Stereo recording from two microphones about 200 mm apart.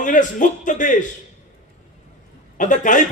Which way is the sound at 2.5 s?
40° left (ahead or behind).